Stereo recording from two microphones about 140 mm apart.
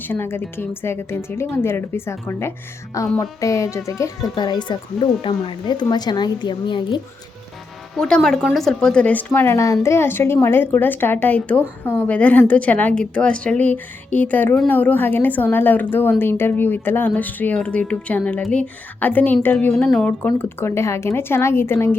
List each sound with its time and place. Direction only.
0.0 s a woman's voice: 15° left (ahead or behind); by 7.0 s 35° left (ahead or behind)
7.9 s a woman's voice: 5° left (ahead or behind)